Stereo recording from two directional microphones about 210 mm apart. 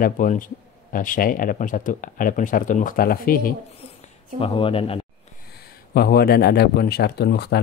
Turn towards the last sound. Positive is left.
turn(degrees=50)  # may be behind; listen again after turning